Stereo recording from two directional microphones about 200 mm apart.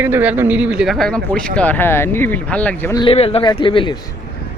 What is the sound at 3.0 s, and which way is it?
Speech, 30° left (ahead or behind).